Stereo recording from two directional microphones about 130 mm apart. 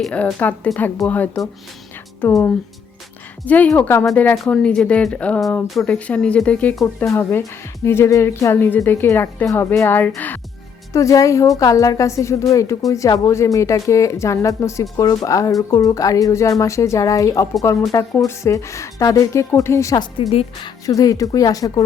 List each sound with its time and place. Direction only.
0.0 s speech: 5° left (ahead or behind)
3.4 s a woman's voice: 10° left (ahead or behind)
10.9 s a woman's voice: 25° left (ahead or behind)